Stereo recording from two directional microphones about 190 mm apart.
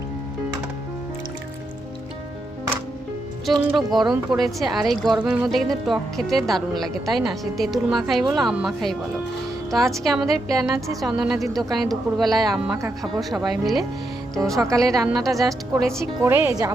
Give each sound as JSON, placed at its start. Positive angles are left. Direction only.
{"t": 3.5, "sound": "speech", "side_deg": -20}
{"t": 4.1, "sound": "speech", "side_deg": 0}
{"t": 14.5, "sound": "speech", "side_deg": -15}
{"t": 14.8, "sound": "speech", "side_deg": 0}
{"t": 16.0, "sound": "speech", "side_deg": -15}